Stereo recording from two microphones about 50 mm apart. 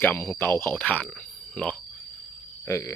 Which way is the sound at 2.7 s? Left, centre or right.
Left.